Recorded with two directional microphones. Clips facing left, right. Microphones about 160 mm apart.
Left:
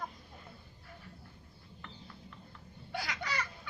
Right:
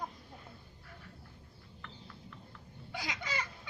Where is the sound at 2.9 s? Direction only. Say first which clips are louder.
Left 1 dB; 20° right (ahead or behind).